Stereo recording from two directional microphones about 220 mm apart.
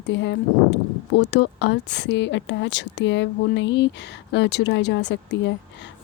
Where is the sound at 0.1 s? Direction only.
55° left (ahead or behind).